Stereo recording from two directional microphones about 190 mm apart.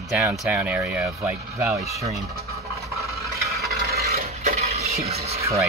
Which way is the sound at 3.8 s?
55° right (ahead or behind).